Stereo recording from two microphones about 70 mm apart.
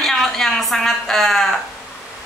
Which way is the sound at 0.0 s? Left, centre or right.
Centre.